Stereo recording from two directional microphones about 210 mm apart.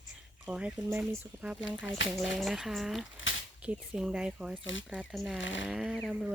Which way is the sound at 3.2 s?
65° left (ahead or behind).